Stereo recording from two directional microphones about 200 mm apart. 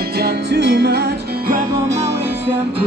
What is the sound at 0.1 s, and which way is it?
Music, 55° right (ahead or behind).